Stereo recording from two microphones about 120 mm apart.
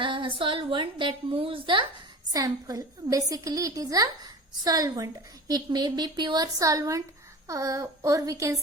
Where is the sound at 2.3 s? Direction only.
30° right (ahead or behind).